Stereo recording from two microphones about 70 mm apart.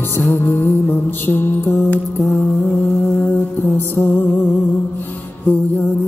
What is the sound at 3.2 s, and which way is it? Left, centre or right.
Mantra, left.